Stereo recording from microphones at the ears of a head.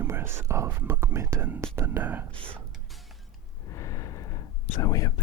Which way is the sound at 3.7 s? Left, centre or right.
Left.